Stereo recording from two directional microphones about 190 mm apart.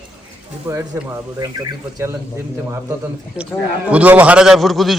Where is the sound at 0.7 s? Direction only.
15° right (ahead or behind).